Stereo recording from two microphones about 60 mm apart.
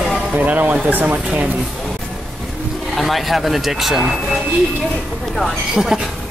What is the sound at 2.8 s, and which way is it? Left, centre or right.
Speech, centre.